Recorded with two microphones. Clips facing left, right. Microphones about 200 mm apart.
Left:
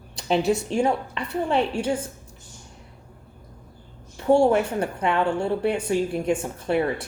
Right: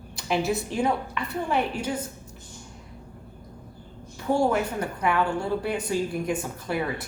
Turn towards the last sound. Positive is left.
turn(degrees=25)  # may be behind; listen again after turning